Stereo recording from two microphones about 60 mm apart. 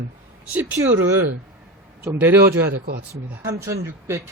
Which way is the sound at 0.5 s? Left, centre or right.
Right.